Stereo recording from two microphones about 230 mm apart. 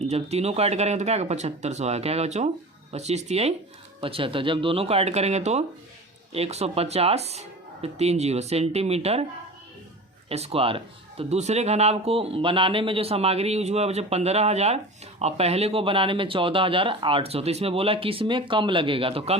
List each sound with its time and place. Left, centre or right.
0.0 s speech: right
10.2 s speech: right